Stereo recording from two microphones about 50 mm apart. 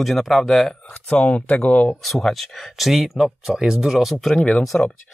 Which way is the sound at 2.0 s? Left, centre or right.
Centre.